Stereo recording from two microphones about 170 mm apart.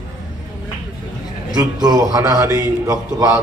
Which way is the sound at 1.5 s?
25° right (ahead or behind).